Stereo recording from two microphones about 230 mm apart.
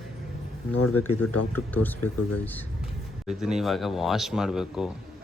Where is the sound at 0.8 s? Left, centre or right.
Left.